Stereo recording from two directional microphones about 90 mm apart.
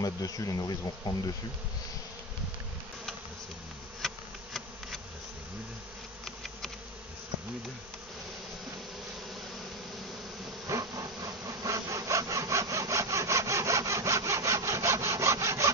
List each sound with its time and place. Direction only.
0.0 s speech: 40° left (ahead or behind)
4.0 s insect: 5° left (ahead or behind)
6.2 s bee: 5° left (ahead or behind)
10.7 s wood: 40° right (ahead or behind)